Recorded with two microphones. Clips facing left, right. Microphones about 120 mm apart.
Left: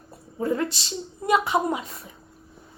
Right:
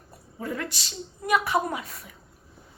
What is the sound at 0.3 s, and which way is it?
A woman's voice, 30° left (ahead or behind).